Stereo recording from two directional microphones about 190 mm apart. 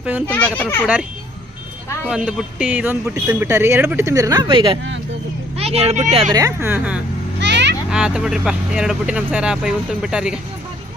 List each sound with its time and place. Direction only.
0.0 s speech: 10° right (ahead or behind)
0.3 s speech: 5° left (ahead or behind)
2.0 s a man's voice: 5° right (ahead or behind); by 6.3 s 35° right (ahead or behind)
6.3 s a man's voice: 15° right (ahead or behind)
7.3 s children playing: 65° right (ahead or behind)
7.9 s speech: 5° right (ahead or behind)